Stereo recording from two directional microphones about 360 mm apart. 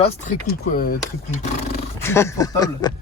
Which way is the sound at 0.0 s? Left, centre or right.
Left.